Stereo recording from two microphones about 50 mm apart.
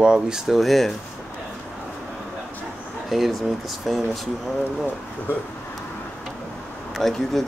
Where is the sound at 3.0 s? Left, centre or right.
Centre.